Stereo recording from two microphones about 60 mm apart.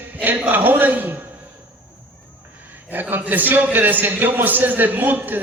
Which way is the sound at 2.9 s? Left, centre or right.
Right.